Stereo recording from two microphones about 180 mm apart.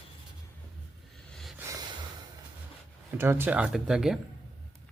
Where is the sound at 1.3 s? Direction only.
Centre (ahead or behind).